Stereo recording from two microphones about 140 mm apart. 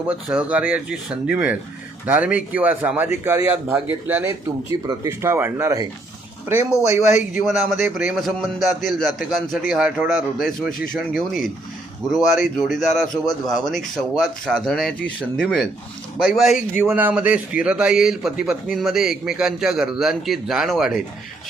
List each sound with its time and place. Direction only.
0.1 s speech: 10° right (ahead or behind)
7.1 s a man's voice: 60° left (ahead or behind)
7.4 s a man's voice: centre (ahead or behind)
16.7 s a man's voice: 15° right (ahead or behind)